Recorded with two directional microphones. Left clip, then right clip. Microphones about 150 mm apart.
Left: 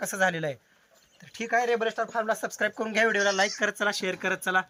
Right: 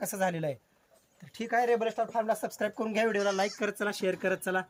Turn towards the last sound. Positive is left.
turn(degrees=0)  # may be behind; listen again after turning